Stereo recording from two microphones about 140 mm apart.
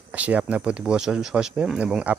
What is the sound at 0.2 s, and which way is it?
Speech, 10° right (ahead or behind).